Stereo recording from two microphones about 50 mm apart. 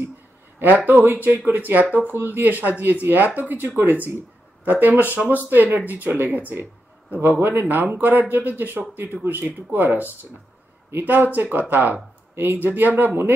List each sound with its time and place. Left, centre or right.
0.6 s speech: right
11.3 s speech: right